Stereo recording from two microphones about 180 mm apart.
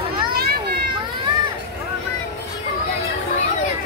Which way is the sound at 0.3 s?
60° right (ahead or behind).